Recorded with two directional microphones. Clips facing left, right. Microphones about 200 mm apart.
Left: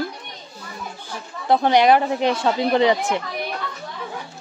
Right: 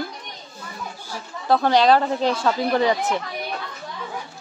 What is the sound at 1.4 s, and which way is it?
Speech, 20° left (ahead or behind).